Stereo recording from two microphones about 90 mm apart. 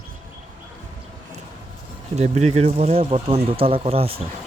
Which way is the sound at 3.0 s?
90° right.